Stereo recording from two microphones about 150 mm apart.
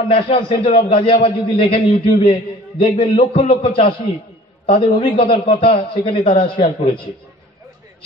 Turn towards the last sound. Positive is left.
turn(degrees=35)  # may be behind; listen again after turning